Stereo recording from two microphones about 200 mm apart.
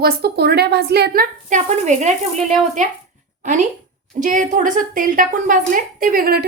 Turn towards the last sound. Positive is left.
turn(degrees=-45)  # may be behind; listen again after turning